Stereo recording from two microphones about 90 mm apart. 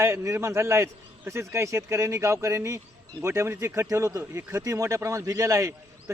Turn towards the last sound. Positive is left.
turn(degrees=-35)  # may be behind; listen again after turning